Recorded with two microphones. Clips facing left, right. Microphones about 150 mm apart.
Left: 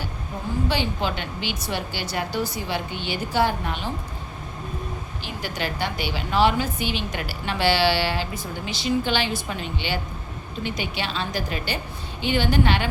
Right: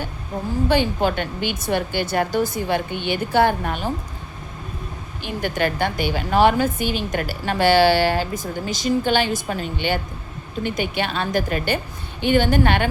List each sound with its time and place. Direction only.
0.7 s a woman's voice: 50° right (ahead or behind)
5.2 s a woman's voice: 55° right (ahead or behind)